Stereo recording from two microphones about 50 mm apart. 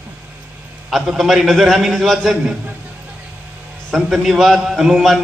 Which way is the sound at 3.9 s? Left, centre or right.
Centre.